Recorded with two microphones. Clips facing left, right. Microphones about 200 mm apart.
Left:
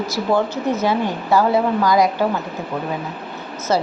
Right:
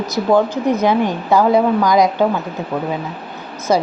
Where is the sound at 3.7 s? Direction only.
15° right (ahead or behind).